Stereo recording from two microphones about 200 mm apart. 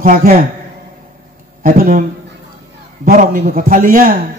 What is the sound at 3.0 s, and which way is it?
A man's voice, 45° right (ahead or behind).